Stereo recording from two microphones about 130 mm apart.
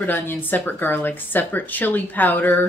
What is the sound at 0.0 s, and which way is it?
Speech, 15° left (ahead or behind).